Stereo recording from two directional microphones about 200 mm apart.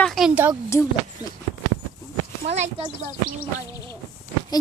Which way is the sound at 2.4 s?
35° right (ahead or behind).